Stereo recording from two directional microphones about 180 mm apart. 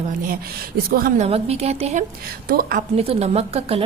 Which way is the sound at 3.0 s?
35° right (ahead or behind).